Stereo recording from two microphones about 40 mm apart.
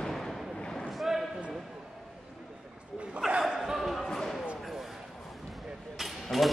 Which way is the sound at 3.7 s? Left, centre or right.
Centre.